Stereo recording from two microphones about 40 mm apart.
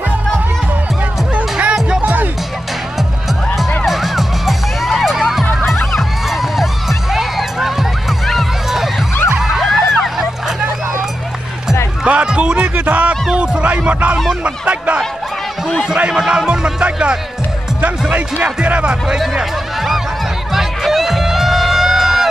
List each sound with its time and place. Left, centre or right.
1.3 s music: right
3.8 s music: centre
5.9 s a sound: centre
8.3 s music: centre
12.0 s music: right
13.1 s a sound: right
16.1 s speech: centre
18.1 s speech: right
19.0 s speech: centre
20.5 s music: centre